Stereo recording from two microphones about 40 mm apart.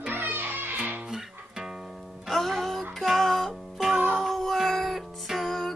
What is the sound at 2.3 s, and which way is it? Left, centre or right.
Music, centre.